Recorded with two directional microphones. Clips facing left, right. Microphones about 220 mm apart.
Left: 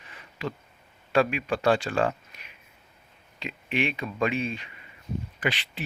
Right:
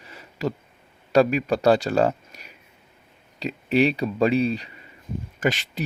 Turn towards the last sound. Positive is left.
turn(degrees=-45)  # may be behind; listen again after turning